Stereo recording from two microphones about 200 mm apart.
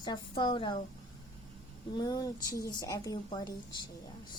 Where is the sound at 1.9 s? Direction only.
20° left (ahead or behind).